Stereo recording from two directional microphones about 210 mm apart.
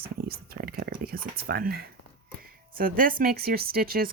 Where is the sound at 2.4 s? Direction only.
45° right (ahead or behind).